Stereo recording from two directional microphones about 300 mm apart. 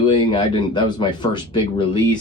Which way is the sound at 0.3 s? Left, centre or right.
Centre.